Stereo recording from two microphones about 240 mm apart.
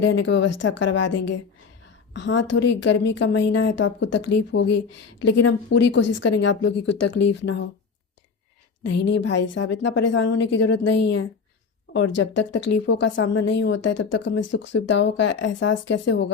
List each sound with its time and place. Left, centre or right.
0.0 s a woman's voice: left
8.8 s a woman's voice: left